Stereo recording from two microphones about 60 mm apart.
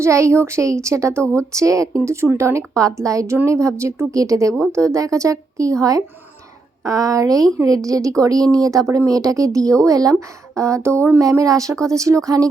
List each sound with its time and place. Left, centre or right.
0.0 s a woman's voice: right
2.0 s a woman's voice: right
3.4 s a woman's voice: right
11.2 s a woman's voice: right